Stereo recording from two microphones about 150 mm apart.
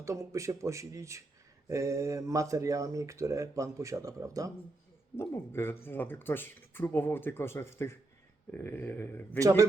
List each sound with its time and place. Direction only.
0.0 s speech: 20° right (ahead or behind)
5.1 s speech: 15° left (ahead or behind)
9.4 s speech: 20° right (ahead or behind)